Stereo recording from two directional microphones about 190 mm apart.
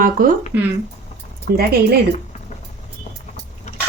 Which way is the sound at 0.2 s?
45° right (ahead or behind).